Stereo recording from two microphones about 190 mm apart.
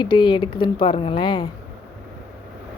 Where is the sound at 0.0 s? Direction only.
25° left (ahead or behind).